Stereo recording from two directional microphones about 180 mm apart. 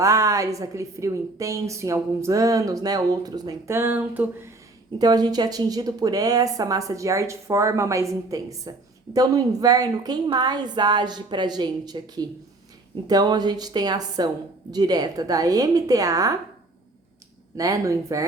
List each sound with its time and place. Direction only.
0.0 s a woman's voice: 20° right (ahead or behind)
4.9 s speech: 20° right (ahead or behind)
17.6 s speech: 20° right (ahead or behind)